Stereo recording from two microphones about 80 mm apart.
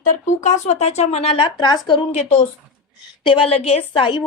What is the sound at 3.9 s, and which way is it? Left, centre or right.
Speech, left.